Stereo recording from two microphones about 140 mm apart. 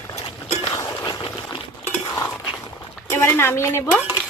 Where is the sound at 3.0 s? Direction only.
20° left (ahead or behind).